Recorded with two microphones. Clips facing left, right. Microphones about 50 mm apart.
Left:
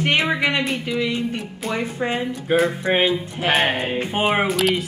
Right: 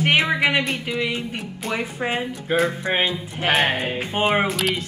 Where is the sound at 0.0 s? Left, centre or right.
Centre.